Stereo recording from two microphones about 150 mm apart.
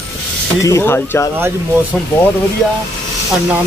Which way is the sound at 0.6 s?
20° left (ahead or behind).